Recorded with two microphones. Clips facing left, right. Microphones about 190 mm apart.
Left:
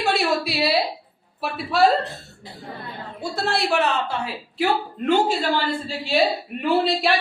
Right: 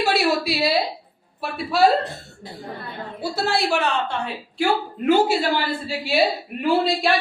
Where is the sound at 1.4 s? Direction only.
Centre (ahead or behind).